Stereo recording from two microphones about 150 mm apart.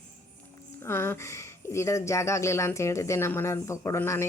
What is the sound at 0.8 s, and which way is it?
Speech, 15° left (ahead or behind).